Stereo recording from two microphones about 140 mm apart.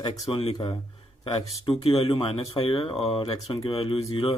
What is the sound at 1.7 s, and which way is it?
Speech, 40° left (ahead or behind).